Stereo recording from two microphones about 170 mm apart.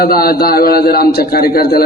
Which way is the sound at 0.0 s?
65° left (ahead or behind).